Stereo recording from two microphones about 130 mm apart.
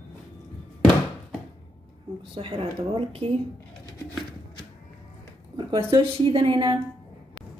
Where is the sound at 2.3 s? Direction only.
45° right (ahead or behind).